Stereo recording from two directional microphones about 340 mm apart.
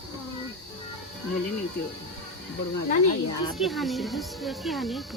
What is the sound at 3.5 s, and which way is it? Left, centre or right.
Speech, centre.